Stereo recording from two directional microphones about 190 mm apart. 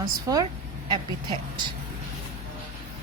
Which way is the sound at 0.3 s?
15° right (ahead or behind).